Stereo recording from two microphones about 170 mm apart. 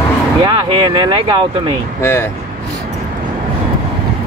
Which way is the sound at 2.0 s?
15° left (ahead or behind).